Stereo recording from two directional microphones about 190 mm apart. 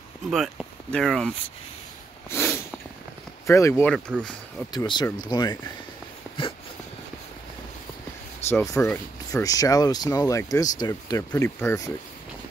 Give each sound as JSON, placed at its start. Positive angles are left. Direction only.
{"t": 0.3, "sound": "speech", "side_deg": 0}
{"t": 2.2, "sound": "snort", "side_deg": 15}
{"t": 3.4, "sound": "speech", "side_deg": 15}
{"t": 3.9, "sound": "speech", "side_deg": 0}
{"t": 4.7, "sound": "speech", "side_deg": 25}
{"t": 8.5, "sound": "speech", "side_deg": 10}